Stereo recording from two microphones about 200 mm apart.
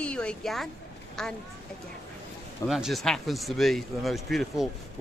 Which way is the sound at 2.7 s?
Centre (ahead or behind).